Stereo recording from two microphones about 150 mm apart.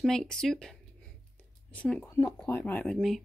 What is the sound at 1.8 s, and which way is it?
Speech, 10° left (ahead or behind).